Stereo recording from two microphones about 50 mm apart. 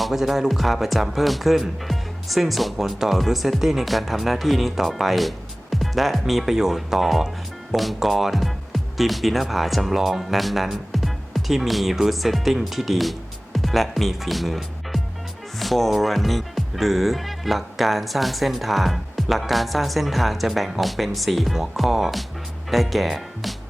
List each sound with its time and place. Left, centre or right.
0.0 s speech: centre